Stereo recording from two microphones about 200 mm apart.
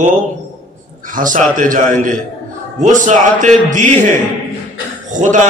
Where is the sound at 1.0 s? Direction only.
40° right (ahead or behind).